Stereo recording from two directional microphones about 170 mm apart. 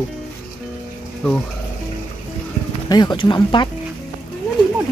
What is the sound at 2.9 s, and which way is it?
Speech, 25° left (ahead or behind).